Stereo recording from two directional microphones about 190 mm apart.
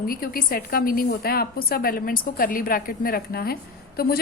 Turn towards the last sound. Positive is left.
turn(degrees=55)  # may be behind; listen again after turning